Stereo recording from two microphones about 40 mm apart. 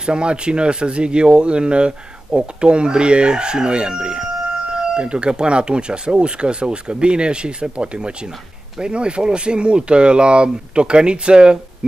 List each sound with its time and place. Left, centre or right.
0.0 s speech: right